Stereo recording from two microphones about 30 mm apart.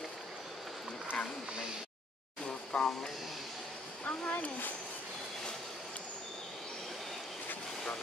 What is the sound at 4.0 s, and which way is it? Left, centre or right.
Speech, left.